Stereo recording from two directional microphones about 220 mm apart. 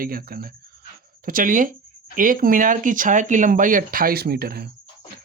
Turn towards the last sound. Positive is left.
turn(degrees=-45)  # may be behind; listen again after turning